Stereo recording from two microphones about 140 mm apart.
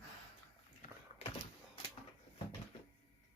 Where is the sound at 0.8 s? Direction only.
45° left (ahead or behind).